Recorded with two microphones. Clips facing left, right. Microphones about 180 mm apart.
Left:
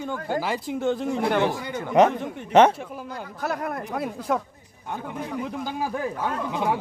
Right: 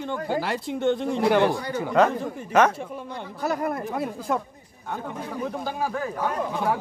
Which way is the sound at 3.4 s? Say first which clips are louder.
Right 3 dB; centre (ahead or behind).